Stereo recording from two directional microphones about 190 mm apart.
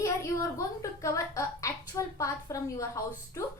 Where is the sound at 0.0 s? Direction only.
15° left (ahead or behind).